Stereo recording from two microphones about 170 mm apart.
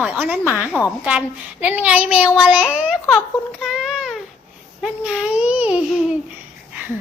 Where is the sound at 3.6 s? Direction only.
Centre (ahead or behind).